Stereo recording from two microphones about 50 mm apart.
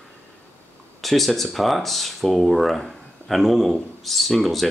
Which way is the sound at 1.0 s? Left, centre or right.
Centre.